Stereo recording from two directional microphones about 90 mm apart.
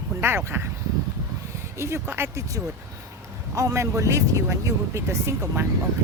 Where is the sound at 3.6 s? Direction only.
35° right (ahead or behind).